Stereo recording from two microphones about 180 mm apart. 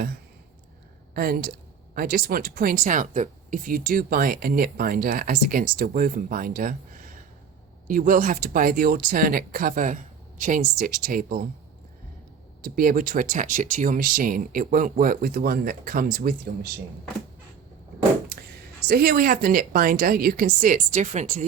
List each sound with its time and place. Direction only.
1.1 s speech: 55° right (ahead or behind)
7.9 s speech: 50° right (ahead or behind)
12.6 s speech: 55° right (ahead or behind)
18.9 s speech: 60° right (ahead or behind); by 21.4 s 40° right (ahead or behind)